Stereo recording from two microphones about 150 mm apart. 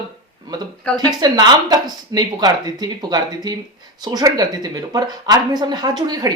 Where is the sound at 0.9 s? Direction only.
25° right (ahead or behind).